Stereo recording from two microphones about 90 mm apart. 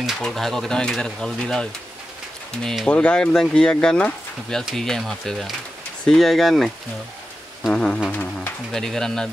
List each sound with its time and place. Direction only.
0.2 s speech: 5° left (ahead or behind)
2.9 s speech: 10° left (ahead or behind)
8.1 s speech: 20° left (ahead or behind)
8.7 s speech: 5° left (ahead or behind)